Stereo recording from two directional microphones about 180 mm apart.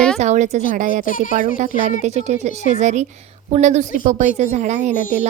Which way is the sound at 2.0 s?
40° right (ahead or behind).